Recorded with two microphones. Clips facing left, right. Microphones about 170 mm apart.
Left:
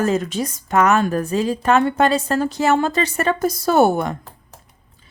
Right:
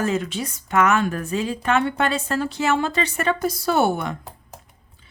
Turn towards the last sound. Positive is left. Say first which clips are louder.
# left 5 dB
turn(degrees=40)  # may be behind; listen again after turning